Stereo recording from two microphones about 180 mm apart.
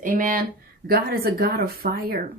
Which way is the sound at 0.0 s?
50° right (ahead or behind).